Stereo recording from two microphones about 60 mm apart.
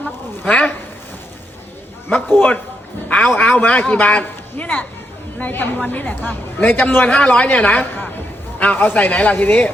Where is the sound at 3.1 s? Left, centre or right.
Left.